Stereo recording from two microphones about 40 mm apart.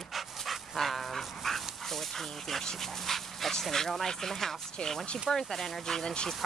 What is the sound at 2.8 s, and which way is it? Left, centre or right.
Speech, centre.